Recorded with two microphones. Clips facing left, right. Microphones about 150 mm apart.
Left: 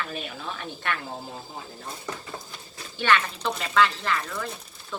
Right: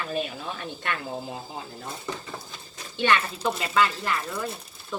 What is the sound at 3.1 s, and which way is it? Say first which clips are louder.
Speech: left 1 dB; 10° right (ahead or behind).